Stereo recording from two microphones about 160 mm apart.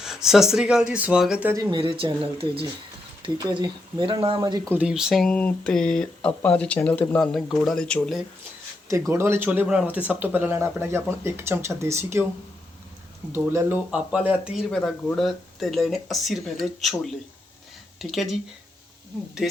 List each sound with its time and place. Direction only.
0.0 s speech: 5° right (ahead or behind)
1.5 s speech: 30° right (ahead or behind)
4.7 s speech: 5° right (ahead or behind)
8.9 s speech: 20° right (ahead or behind)
13.3 s speech: 15° right (ahead or behind)
14.7 s speech: 5° left (ahead or behind)
19.4 s speech: centre (ahead or behind)